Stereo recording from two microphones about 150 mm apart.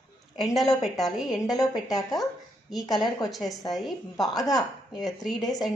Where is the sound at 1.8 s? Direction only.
25° left (ahead or behind).